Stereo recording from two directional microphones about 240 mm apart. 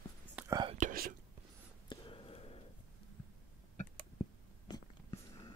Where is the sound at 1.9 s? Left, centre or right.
Left.